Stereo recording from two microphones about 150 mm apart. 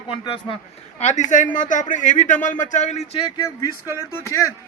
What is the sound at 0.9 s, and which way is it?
A man's voice, 50° left (ahead or behind).